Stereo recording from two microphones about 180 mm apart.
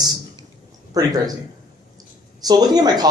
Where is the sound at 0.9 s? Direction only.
20° right (ahead or behind).